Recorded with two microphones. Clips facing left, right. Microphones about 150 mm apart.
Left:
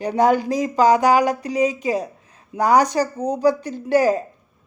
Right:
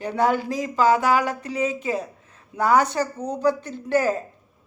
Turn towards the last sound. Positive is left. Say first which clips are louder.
# left 4 dB
turn(degrees=15)  # may be behind; listen again after turning